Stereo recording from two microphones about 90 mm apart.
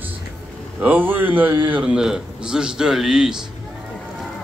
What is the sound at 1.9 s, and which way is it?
A man's voice, 5° right (ahead or behind).